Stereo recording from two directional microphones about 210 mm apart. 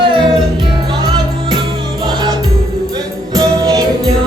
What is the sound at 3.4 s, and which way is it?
Music, 15° right (ahead or behind).